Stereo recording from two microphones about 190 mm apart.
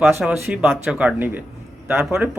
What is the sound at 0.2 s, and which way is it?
A man's voice, 5° right (ahead or behind).